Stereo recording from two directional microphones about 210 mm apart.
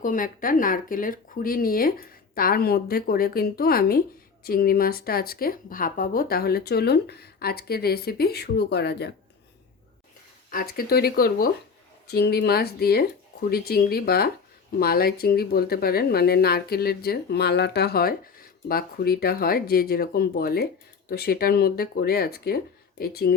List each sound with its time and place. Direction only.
0.0 s speech: 40° left (ahead or behind)
10.5 s speech: 45° left (ahead or behind)